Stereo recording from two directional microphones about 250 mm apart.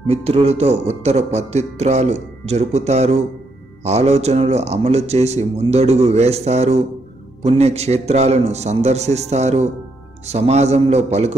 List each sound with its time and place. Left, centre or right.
0.0 s speech: right